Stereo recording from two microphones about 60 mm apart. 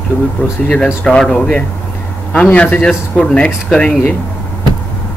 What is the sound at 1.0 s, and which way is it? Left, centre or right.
Speech, centre.